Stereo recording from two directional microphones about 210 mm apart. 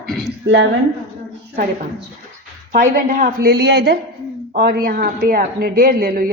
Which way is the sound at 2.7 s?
40° right (ahead or behind).